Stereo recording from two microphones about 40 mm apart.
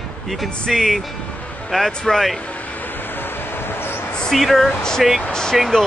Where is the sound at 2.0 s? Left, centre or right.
Centre.